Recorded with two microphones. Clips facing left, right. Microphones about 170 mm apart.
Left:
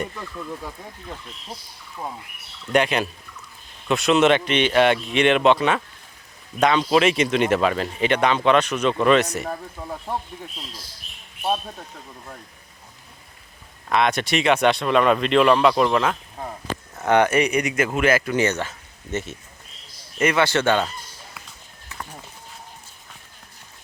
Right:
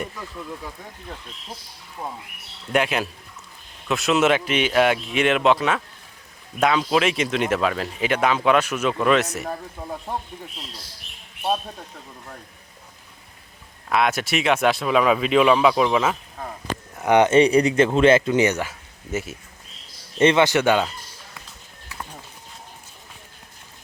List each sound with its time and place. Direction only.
2.7 s speech: 5° right (ahead or behind)
13.9 s speech: 5° right (ahead or behind)
17.0 s speech: 15° right (ahead or behind)
20.1 s speech: 25° right (ahead or behind)